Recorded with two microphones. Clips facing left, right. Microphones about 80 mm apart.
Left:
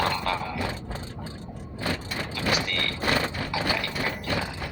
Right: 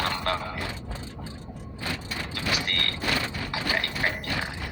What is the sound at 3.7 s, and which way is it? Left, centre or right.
Mechanisms, right.